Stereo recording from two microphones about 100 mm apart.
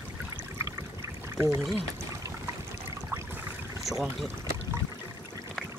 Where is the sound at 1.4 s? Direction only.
30° right (ahead or behind).